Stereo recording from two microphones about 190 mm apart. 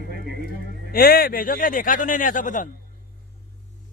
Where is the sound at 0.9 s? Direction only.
50° left (ahead or behind).